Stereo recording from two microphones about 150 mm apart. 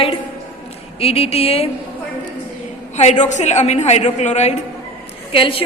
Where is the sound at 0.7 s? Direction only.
40° left (ahead or behind).